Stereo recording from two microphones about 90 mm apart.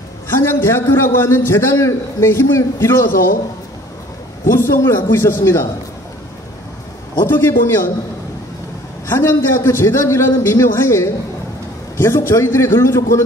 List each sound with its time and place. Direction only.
0.3 s a man's voice: 25° left (ahead or behind)
4.6 s a man's voice: 30° left (ahead or behind)
7.2 s a man's voice: 30° left (ahead or behind)
9.1 s a man's voice: 30° left (ahead or behind)